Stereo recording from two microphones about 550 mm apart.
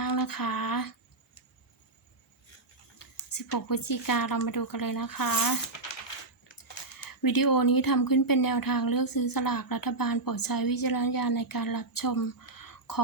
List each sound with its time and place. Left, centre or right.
0.0 s a sound: left
3.0 s speech: left
6.6 s speech: left